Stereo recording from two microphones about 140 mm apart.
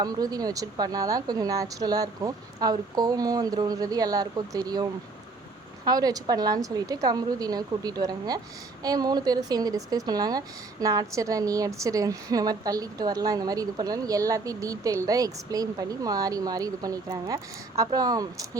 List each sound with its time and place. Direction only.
0.0 s a woman's voice: 25° right (ahead or behind)